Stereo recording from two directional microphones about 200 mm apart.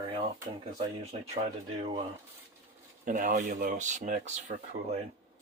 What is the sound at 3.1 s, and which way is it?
Speech, 40° right (ahead or behind).